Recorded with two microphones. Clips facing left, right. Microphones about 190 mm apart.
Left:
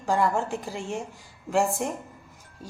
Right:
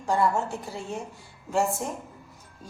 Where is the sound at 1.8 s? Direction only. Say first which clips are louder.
Left 3 dB; 80° left.